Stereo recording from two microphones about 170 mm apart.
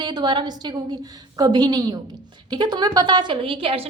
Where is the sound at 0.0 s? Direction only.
25° right (ahead or behind).